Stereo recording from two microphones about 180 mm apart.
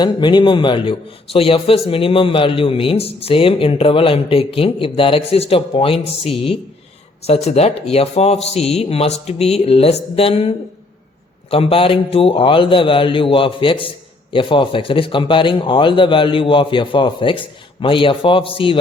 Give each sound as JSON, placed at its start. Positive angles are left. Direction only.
{"t": 0.0, "sound": "a man's voice", "side_deg": 25}
{"t": 11.5, "sound": "speech", "side_deg": 30}